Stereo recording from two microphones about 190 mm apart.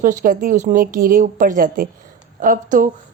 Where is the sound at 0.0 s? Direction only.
45° right (ahead or behind).